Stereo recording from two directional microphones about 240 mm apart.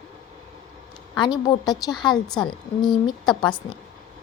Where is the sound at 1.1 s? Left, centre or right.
Centre.